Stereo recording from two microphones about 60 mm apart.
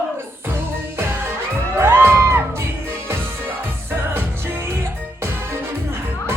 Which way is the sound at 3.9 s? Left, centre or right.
Right.